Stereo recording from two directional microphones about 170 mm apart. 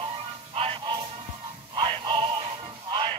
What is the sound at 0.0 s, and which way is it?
Music, 35° right (ahead or behind).